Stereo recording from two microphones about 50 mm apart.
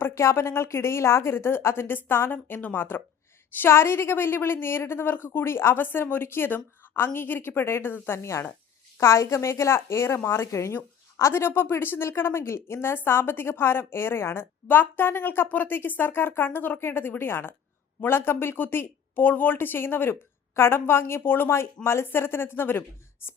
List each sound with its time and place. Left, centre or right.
0.1 s a woman's voice: left
2.3 s a woman's voice: left
2.7 s a woman's voice: left
8.2 s a woman's voice: left
10.2 s a woman's voice: left
10.4 s speech: left
11.2 s a woman's voice: left